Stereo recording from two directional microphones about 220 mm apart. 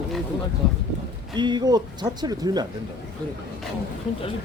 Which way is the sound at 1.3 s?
20° right (ahead or behind).